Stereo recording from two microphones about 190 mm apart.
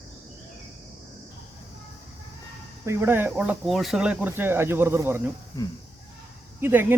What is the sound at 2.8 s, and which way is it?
Speech, 15° right (ahead or behind).